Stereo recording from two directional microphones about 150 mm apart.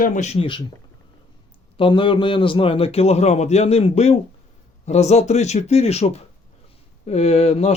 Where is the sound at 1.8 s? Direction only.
35° left (ahead or behind).